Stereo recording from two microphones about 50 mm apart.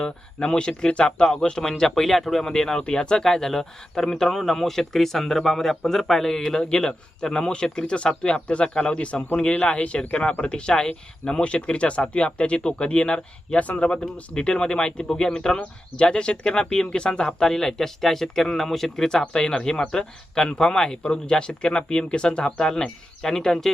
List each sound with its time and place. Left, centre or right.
0.0 s speech: centre